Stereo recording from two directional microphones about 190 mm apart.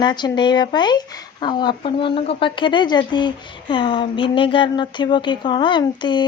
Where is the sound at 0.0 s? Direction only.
25° left (ahead or behind).